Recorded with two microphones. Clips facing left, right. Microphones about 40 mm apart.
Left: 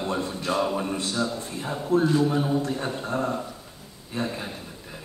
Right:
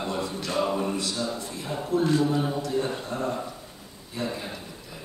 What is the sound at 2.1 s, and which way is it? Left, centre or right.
Speech, left.